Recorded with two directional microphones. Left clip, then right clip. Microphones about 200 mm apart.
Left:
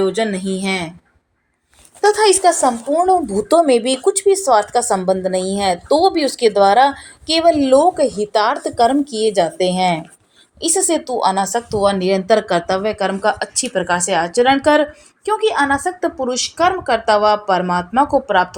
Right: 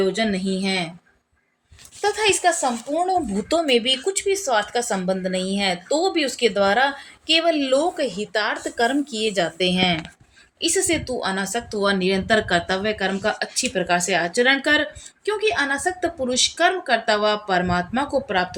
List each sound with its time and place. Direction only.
0.0 s a woman's voice: 20° left (ahead or behind)
2.0 s a woman's voice: 25° left (ahead or behind)
10.6 s a woman's voice: 10° left (ahead or behind)